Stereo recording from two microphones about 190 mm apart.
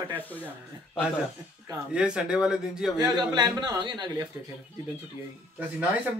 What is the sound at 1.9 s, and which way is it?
Speech, 5° right (ahead or behind).